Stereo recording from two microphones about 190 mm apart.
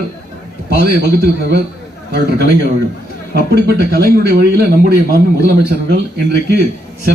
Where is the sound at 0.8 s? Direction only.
60° right (ahead or behind).